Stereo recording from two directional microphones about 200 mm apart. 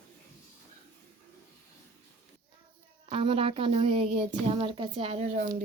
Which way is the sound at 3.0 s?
25° right (ahead or behind).